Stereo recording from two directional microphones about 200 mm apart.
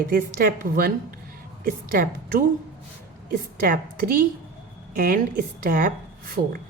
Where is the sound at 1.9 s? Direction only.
45° right (ahead or behind).